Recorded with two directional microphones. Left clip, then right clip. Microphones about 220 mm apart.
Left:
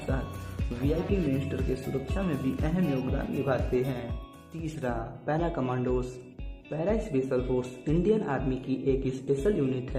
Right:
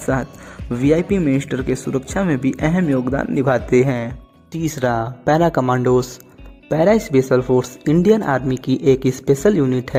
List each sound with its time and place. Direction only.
0.1 s speech: 40° right (ahead or behind)